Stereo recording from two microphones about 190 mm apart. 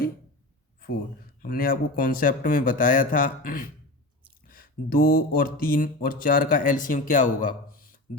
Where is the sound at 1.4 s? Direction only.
50° left (ahead or behind).